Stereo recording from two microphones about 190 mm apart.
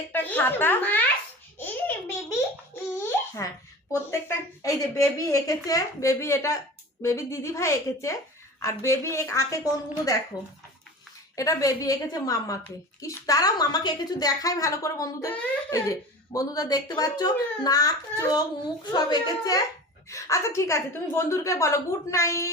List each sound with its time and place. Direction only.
0.1 s speech: 10° left (ahead or behind)
1.5 s a sound: 10° left (ahead or behind)
3.0 s babbling: 15° left (ahead or behind)
3.9 s a woman's voice: 15° left (ahead or behind)